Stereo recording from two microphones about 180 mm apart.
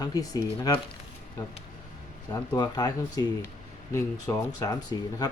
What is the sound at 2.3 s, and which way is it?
Speech, 20° left (ahead or behind).